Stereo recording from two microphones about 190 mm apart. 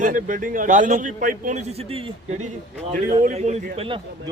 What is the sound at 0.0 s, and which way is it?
A man's voice, 45° right (ahead or behind).